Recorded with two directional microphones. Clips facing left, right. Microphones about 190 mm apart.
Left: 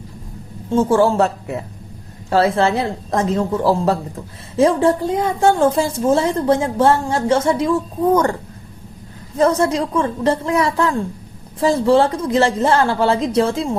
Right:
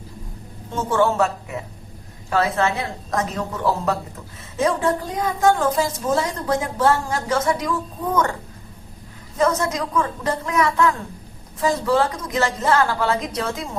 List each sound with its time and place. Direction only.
0.7 s a woman's voice: 30° left (ahead or behind)
9.4 s a woman's voice: 30° left (ahead or behind)